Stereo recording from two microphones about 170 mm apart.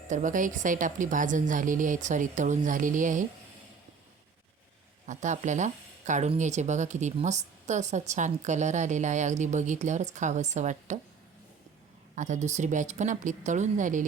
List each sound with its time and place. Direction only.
0.1 s speech: 45° right (ahead or behind)
5.0 s speech: 45° right (ahead or behind)
12.1 s speech: 45° right (ahead or behind)